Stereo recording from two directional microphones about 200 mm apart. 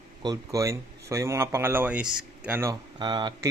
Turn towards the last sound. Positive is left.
turn(degrees=-20)  # may be behind; listen again after turning